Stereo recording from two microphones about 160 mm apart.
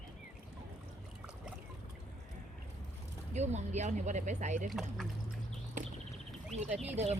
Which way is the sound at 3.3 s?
45° right (ahead or behind).